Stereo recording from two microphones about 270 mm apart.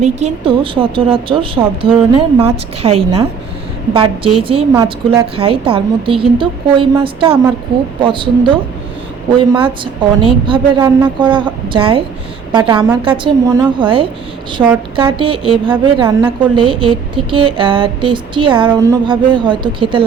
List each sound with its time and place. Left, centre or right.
0.0 s a woman's voice: right
4.4 s a woman's voice: right
14.9 s a woman's voice: centre